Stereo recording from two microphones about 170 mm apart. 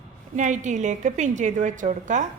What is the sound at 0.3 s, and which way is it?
A woman's voice, 45° right (ahead or behind).